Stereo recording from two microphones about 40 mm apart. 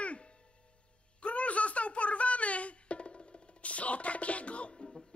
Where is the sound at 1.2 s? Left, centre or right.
Left.